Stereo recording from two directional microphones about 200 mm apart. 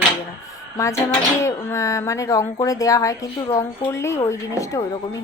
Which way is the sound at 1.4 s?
15° left (ahead or behind).